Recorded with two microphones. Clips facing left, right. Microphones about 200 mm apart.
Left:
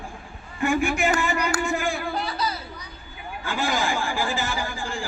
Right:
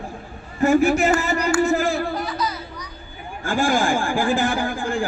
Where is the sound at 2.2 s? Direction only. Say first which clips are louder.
Right 2 dB; 30° left (ahead or behind).